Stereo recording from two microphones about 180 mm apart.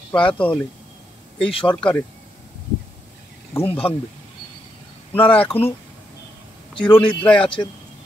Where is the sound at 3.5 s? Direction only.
10° left (ahead or behind).